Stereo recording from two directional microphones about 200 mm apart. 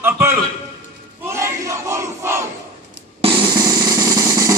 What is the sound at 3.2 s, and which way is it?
Drum, 25° right (ahead or behind).